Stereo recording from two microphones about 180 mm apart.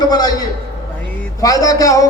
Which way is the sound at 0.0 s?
20° left (ahead or behind).